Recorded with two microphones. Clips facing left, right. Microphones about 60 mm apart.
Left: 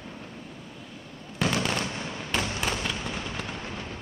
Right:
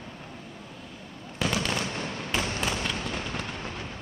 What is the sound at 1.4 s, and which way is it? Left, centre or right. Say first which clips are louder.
Fireworks: left 1 dB; centre.